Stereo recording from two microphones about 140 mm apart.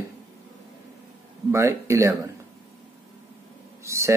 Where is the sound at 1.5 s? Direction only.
20° right (ahead or behind).